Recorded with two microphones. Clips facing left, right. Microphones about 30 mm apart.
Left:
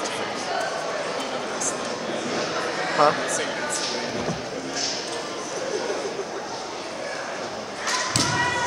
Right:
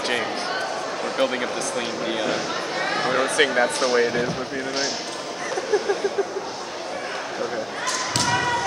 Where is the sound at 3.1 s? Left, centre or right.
Right.